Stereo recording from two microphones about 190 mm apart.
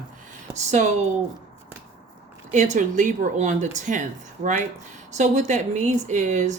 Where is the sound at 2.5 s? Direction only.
40° right (ahead or behind).